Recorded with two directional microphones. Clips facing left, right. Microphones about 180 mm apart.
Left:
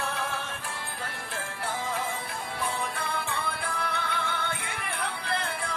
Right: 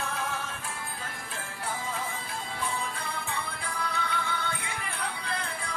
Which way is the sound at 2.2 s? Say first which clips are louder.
Left 2 dB; 65° left (ahead or behind).